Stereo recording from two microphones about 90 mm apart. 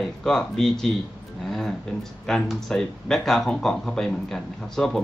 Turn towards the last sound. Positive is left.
turn(degrees=5)  # may be behind; listen again after turning